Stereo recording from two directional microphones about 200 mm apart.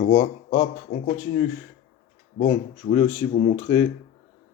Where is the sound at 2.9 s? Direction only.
10° left (ahead or behind).